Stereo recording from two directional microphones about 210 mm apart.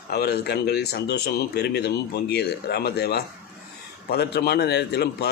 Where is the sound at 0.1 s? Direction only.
50° left (ahead or behind).